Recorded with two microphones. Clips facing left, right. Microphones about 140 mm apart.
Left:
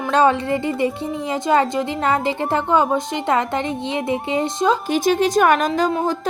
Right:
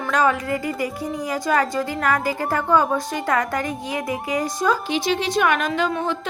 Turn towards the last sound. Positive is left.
turn(degrees=35)  # may be behind; listen again after turning